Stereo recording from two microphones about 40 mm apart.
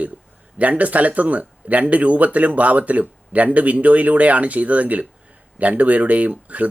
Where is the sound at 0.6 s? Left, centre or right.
Right.